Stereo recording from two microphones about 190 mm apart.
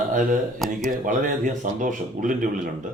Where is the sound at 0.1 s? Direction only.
45° right (ahead or behind).